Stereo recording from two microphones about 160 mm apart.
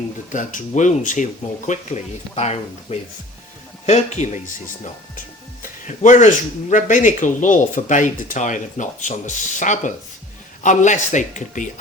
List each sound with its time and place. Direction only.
0.3 s speech: 50° left (ahead or behind)